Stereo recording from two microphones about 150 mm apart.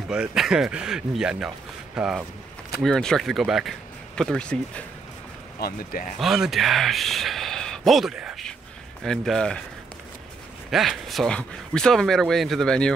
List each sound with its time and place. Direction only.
0.1 s speech: 5° right (ahead or behind)
5.6 s speech: 80° left
6.1 s speech: centre (ahead or behind)
10.7 s speech: centre (ahead or behind)